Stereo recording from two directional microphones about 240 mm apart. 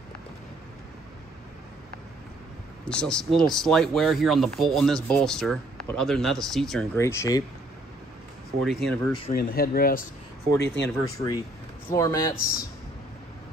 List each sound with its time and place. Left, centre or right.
2.9 s speech: centre
8.6 s speech: centre
9.3 s speech: left
10.5 s speech: centre